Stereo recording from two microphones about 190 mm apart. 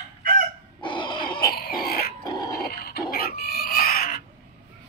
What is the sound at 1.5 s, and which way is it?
Chicken, 55° left (ahead or behind).